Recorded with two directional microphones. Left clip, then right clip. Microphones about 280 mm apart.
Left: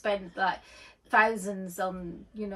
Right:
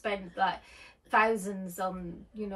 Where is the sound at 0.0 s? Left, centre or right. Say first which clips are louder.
Left 2 dB; centre.